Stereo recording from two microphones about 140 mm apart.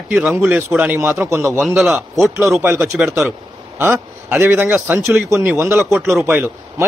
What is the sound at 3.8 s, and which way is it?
A man's voice, 15° right (ahead or behind).